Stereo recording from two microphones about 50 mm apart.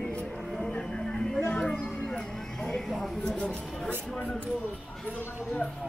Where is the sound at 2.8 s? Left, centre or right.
Centre.